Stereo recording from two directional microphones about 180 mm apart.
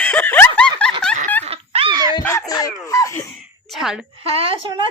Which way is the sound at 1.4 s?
35° right (ahead or behind).